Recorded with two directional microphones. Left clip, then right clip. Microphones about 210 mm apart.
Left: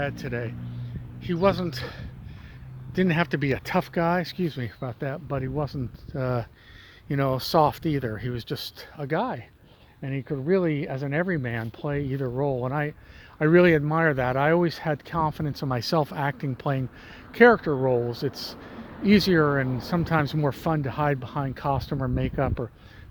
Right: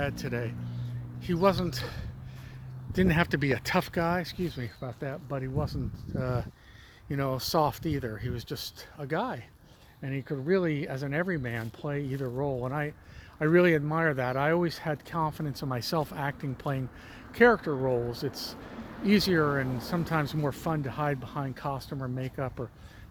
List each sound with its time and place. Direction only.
0.0 s speech: centre (ahead or behind)
4.0 s speech: 40° left (ahead or behind)